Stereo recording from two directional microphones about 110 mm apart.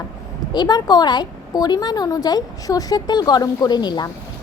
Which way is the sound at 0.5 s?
40° left (ahead or behind).